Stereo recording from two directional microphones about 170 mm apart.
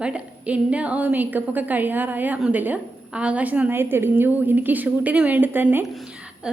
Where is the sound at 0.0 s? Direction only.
5° right (ahead or behind).